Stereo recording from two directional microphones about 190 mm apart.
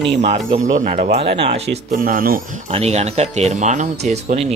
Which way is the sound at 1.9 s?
45° right (ahead or behind).